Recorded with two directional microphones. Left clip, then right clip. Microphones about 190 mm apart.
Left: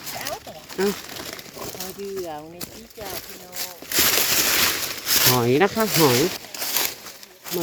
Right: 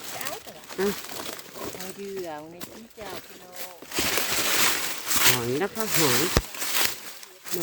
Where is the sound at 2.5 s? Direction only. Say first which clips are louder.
Left 4 dB; 55° left (ahead or behind).